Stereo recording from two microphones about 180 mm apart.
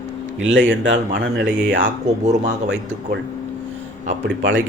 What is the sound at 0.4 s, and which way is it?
Speech, 90° right.